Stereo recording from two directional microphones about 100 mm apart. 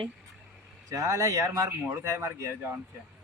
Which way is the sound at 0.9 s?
35° right (ahead or behind).